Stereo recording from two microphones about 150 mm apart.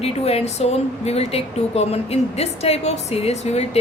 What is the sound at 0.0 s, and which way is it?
A woman's voice, 45° left (ahead or behind).